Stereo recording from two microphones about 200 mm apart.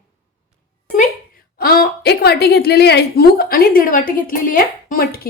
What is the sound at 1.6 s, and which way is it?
A woman's voice, 50° left (ahead or behind).